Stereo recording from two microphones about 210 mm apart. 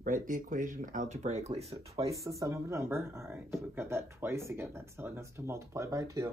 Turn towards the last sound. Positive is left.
turn(degrees=-15)  # may be behind; listen again after turning